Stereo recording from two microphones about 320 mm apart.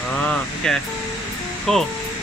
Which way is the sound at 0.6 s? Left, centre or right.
Centre.